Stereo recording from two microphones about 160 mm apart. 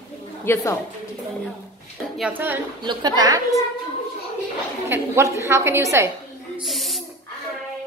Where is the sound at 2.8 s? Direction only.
25° right (ahead or behind).